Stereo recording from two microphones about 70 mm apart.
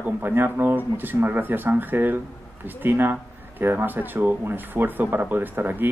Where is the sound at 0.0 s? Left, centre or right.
Right.